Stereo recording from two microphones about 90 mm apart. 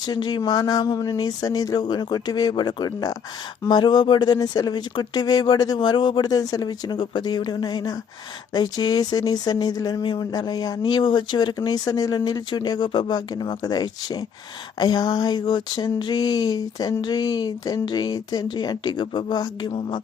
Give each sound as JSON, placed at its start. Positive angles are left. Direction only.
{"t": 0.0, "sound": "speech", "side_deg": 50}